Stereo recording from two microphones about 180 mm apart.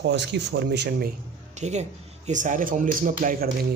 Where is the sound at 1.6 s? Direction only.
40° right (ahead or behind).